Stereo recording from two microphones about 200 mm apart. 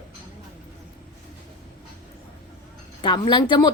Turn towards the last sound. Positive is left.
turn(degrees=25)  # may be behind; listen again after turning